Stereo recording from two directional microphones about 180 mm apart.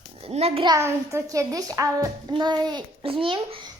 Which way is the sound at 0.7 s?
15° right (ahead or behind).